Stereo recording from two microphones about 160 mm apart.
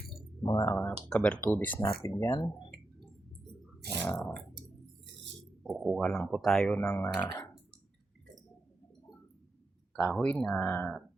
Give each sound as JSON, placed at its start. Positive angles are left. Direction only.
{"t": 0.4, "sound": "speech", "side_deg": 20}
{"t": 4.0, "sound": "speech", "side_deg": 10}
{"t": 5.8, "sound": "speech", "side_deg": 0}
{"t": 10.0, "sound": "speech", "side_deg": 10}